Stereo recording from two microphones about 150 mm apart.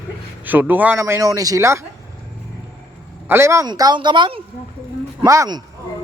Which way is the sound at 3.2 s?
15° right (ahead or behind).